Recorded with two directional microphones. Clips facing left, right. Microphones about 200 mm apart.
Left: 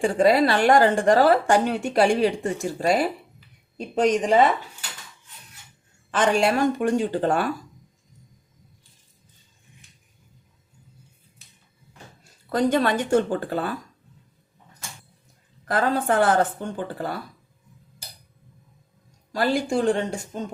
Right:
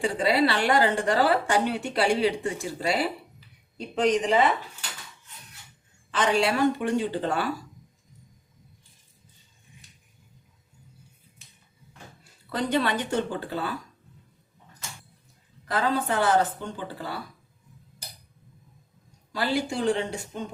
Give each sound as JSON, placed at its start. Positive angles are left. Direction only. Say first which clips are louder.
{"t": 0.0, "sound": "a woman's voice", "louder": "left 5 dB", "side_deg": 50}
{"t": 6.1, "sound": "a woman's voice", "louder": "left 3 dB", "side_deg": 50}
{"t": 12.5, "sound": "a woman's voice", "louder": "left 5 dB", "side_deg": 45}
{"t": 15.6, "sound": "a woman's voice", "louder": "left 3 dB", "side_deg": 50}
{"t": 19.3, "sound": "a woman's voice", "louder": "left 5 dB", "side_deg": 50}